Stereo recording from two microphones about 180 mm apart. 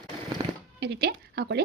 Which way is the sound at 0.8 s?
65° right (ahead or behind).